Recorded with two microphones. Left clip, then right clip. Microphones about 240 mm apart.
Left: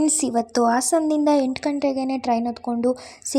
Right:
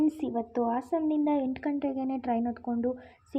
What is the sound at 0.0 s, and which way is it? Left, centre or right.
A woman's voice, left.